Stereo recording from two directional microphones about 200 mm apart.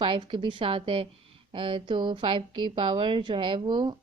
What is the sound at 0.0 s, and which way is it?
Speech, 25° right (ahead or behind).